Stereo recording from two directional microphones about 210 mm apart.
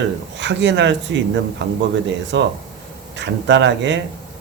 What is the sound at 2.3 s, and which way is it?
Speech, 60° right (ahead or behind).